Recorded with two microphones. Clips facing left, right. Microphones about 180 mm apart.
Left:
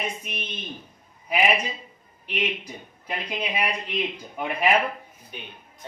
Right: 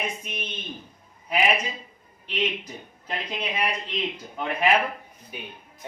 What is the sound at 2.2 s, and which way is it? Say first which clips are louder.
Speech: right 1 dB; 10° left (ahead or behind).